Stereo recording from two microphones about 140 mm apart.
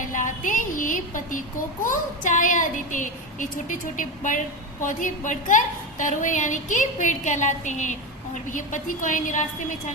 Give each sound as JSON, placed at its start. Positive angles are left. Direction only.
{"t": 0.1, "sound": "a child's voice", "side_deg": 65}